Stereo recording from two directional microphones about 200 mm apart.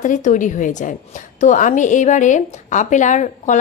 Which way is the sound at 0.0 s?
40° left (ahead or behind).